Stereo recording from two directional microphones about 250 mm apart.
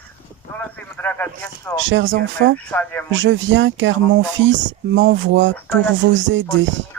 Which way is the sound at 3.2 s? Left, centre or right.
Right.